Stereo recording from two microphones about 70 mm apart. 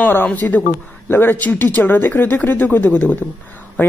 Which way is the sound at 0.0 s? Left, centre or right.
Left.